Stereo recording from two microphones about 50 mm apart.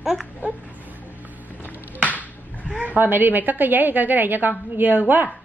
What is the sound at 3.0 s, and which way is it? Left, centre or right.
A woman's voice, right.